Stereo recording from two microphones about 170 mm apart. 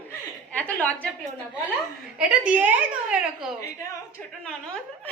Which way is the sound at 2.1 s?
5° right (ahead or behind).